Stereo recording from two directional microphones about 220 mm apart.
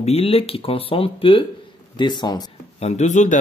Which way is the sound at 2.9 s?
30° left (ahead or behind).